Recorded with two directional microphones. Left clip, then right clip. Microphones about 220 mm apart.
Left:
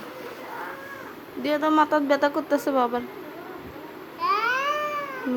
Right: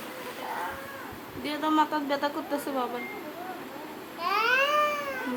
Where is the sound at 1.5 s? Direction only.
25° left (ahead or behind).